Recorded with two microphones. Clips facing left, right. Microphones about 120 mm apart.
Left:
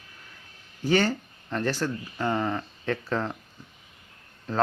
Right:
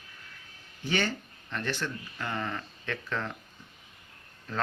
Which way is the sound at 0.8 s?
40° left (ahead or behind).